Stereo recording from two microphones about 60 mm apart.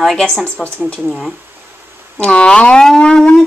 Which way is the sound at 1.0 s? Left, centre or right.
Centre.